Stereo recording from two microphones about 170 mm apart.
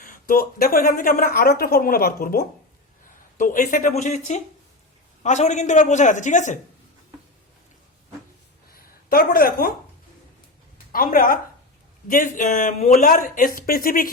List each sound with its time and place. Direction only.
0.0 s a woman's voice: 55° left (ahead or behind)
8.7 s a sound: 60° left (ahead or behind)
10.9 s a woman's voice: 55° left (ahead or behind)